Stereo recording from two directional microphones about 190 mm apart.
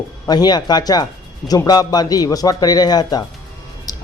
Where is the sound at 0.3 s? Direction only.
20° left (ahead or behind).